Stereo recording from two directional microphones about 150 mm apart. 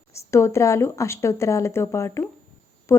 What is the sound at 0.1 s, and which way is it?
A woman's voice, 20° left (ahead or behind).